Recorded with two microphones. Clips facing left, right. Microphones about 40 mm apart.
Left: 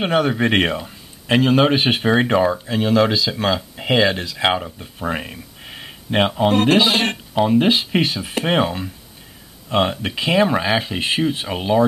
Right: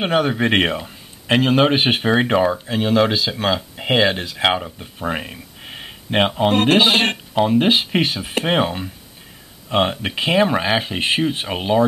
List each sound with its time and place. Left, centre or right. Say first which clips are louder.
0.0 s a man's voice: even; centre
4.5 s speech: even; centre
4.9 s a sound: even; centre
6.1 s a man's voice: even; centre